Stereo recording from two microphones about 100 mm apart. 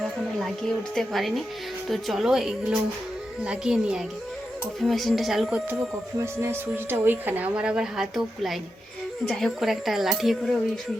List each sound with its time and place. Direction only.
0.0 s a woman's voice: centre (ahead or behind)
6.1 s a woman's voice: 25° right (ahead or behind); by 10.6 s centre (ahead or behind)